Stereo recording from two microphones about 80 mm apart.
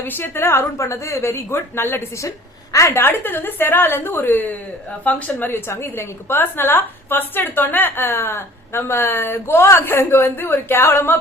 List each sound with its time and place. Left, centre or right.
0.0 s a woman's voice: left
2.7 s a woman's voice: left
3.0 s a woman's voice: left